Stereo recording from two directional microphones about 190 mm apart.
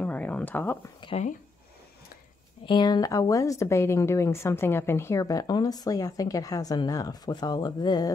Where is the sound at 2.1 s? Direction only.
50° left (ahead or behind).